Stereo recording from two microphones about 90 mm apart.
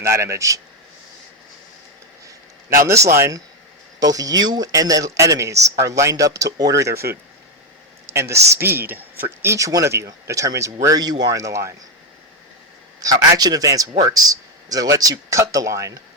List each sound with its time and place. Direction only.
0.0 s speech: 30° right (ahead or behind)
2.2 s speech: 35° right (ahead or behind)
4.0 s speech: 45° right (ahead or behind)
8.1 s speech: 30° right (ahead or behind)
13.0 s speech: 40° right (ahead or behind)